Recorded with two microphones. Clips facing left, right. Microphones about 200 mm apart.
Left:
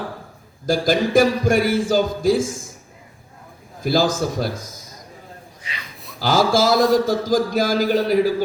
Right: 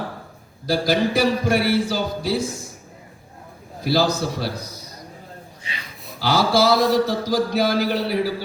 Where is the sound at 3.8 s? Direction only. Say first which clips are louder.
Left 1 dB; 50° left (ahead or behind).